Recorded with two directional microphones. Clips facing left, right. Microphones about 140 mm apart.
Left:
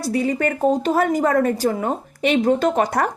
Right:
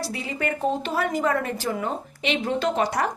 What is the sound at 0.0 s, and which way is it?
Speech, 45° left (ahead or behind).